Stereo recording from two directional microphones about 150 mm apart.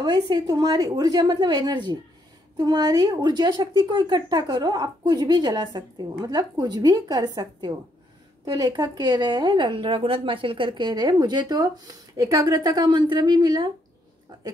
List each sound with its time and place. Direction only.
0.0 s a woman's voice: 25° right (ahead or behind)